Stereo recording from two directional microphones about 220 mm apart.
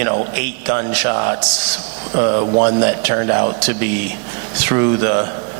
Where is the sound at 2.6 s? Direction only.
15° right (ahead or behind).